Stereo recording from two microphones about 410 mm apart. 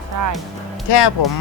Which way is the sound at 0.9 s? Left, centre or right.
Left.